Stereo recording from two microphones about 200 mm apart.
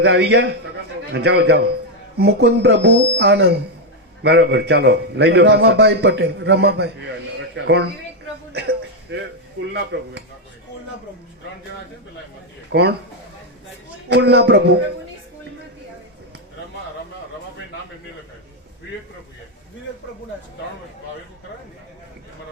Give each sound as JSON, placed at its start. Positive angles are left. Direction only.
{"t": 0.0, "sound": "a man's voice", "side_deg": -55}
{"t": 12.7, "sound": "a man's voice", "side_deg": -60}
{"t": 14.1, "sound": "a man's voice", "side_deg": -55}